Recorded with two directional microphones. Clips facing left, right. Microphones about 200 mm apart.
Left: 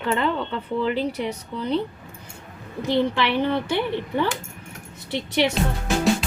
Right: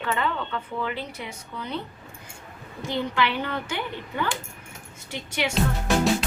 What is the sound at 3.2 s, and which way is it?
Speech, 25° left (ahead or behind).